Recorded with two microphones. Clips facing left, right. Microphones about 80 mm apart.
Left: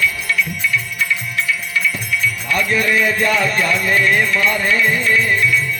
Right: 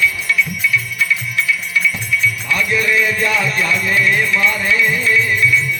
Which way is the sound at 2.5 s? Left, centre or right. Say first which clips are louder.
Left 1 dB; left.